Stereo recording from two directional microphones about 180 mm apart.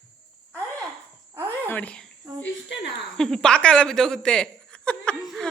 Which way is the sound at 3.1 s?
5° left (ahead or behind).